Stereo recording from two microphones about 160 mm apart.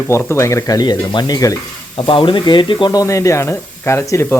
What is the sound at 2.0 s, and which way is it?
Speech, 35° left (ahead or behind).